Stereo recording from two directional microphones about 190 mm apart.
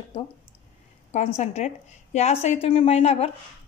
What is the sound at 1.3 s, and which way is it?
A woman's voice, 35° left (ahead or behind).